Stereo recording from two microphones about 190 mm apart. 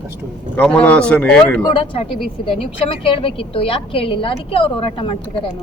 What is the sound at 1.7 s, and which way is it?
A woman's voice, 25° left (ahead or behind).